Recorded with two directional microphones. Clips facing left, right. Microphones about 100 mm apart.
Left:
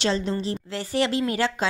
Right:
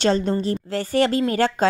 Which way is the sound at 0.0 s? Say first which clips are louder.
Right 5 dB; 45° right (ahead or behind).